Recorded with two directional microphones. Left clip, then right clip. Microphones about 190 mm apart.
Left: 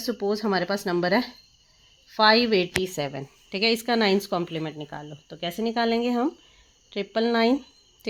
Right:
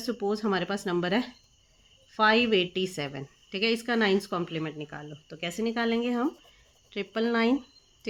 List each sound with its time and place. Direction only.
0.0 s a woman's voice: 20° left (ahead or behind)